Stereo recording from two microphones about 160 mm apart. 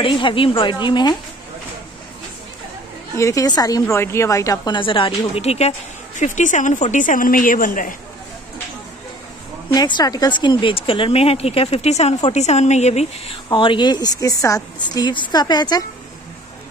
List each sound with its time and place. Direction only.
0.0 s a woman's voice: 30° left (ahead or behind)
3.2 s a woman's voice: 20° left (ahead or behind); by 7.9 s 60° left (ahead or behind)
9.8 s a woman's voice: 25° left (ahead or behind); by 13.4 s 45° left (ahead or behind)
13.5 s speech: 30° left (ahead or behind)